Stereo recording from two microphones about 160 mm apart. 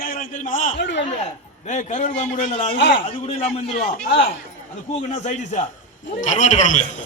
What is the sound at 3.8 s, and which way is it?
Speech, 65° left (ahead or behind).